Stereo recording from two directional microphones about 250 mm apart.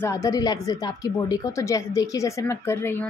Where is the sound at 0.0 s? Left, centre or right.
Centre.